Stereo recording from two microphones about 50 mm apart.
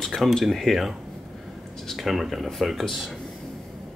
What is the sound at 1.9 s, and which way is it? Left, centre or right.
Speech, centre.